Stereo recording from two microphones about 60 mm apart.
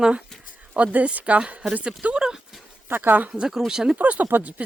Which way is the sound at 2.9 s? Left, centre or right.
Right.